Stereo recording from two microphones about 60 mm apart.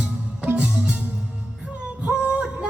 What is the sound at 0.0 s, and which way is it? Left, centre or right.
Music, right.